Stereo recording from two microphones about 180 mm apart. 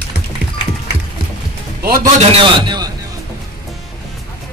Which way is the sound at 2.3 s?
25° right (ahead or behind).